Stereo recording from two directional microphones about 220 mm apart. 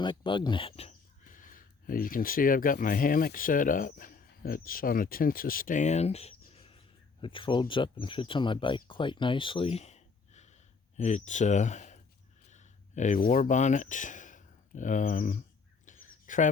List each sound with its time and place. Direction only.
0.0 s speech: 20° left (ahead or behind)
6.5 s bird: 25° left (ahead or behind)
7.2 s speech: 25° left (ahead or behind)
15.9 s a sound: 35° left (ahead or behind)